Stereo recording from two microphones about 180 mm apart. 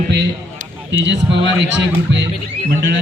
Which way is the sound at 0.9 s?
85° right.